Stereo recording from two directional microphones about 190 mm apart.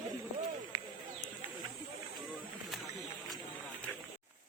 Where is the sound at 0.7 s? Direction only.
20° right (ahead or behind).